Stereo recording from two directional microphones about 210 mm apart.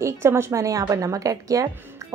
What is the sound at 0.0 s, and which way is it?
A woman's voice, 15° right (ahead or behind).